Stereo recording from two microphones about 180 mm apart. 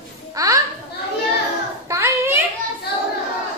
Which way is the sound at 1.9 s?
15° right (ahead or behind).